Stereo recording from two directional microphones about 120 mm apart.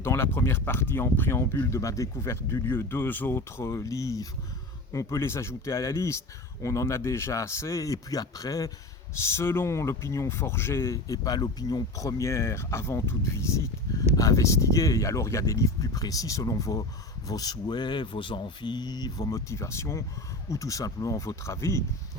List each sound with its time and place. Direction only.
0.0 s speech: 20° left (ahead or behind)